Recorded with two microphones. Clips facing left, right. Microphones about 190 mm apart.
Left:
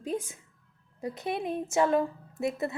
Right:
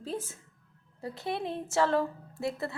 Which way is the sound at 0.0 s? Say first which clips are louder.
Left 3 dB; 15° left (ahead or behind).